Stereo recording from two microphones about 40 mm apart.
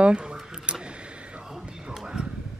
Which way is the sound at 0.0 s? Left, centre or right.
Right.